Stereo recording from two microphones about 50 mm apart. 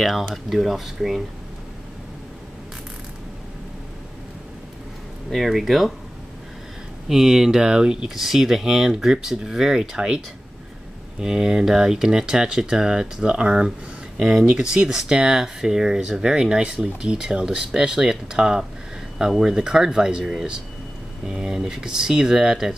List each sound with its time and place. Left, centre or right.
0.3 s speech: centre
5.3 s speech: centre
7.1 s speech: centre